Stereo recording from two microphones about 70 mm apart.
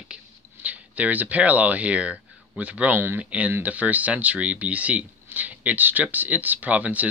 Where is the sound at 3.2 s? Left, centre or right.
Right.